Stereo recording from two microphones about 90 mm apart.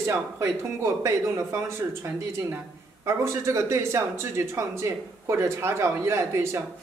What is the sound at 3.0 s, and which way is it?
Speech, 30° right (ahead or behind).